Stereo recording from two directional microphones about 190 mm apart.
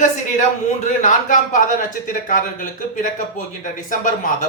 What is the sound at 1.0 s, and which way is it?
Speech, 40° left (ahead or behind).